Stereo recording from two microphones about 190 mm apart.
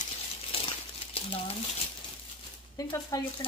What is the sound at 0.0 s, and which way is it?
Crumpling, 30° left (ahead or behind).